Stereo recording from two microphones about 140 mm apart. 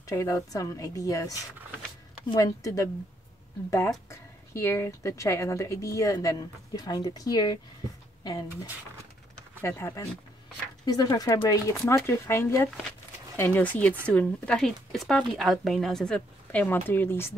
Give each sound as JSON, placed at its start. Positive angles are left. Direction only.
{"t": 0.0, "sound": "speech", "side_deg": 20}
{"t": 4.1, "sound": "speech", "side_deg": 20}
{"t": 9.6, "sound": "speech", "side_deg": 15}